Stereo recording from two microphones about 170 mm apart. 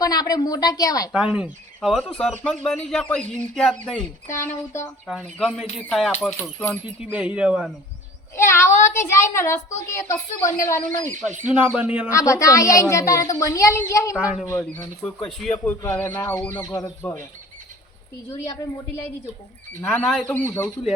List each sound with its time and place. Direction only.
0.0 s a woman's voice: 20° left (ahead or behind)
1.1 s speech: 5° right (ahead or behind)
4.3 s a woman's voice: 15° left (ahead or behind)
5.0 s a woman's voice: centre (ahead or behind)
6.8 s speech: 5° right (ahead or behind)
8.4 s a woman's voice: 15° left (ahead or behind)
11.4 s speech: 10° right (ahead or behind)
12.1 s a woman's voice: 20° left (ahead or behind)
14.2 s speech: 5° right (ahead or behind)
15.0 s a woman's voice: 5° left (ahead or behind)
16.6 s a woman's voice: 20° left (ahead or behind)
18.3 s a woman's voice: 20° left (ahead or behind)
19.8 s a woman's voice: 10° left (ahead or behind)